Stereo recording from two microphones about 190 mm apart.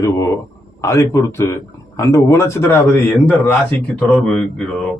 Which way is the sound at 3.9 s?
5° left (ahead or behind).